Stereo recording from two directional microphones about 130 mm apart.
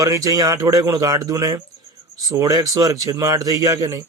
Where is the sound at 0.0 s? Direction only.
25° right (ahead or behind).